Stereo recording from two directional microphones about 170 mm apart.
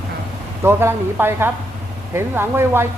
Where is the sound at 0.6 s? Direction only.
15° right (ahead or behind).